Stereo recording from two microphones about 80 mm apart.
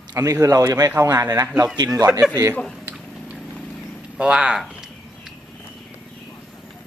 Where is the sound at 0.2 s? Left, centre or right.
Right.